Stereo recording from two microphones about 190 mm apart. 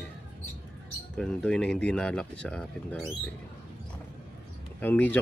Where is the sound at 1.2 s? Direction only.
5° left (ahead or behind).